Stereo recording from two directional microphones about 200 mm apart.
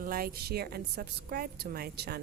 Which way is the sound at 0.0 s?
45° right (ahead or behind).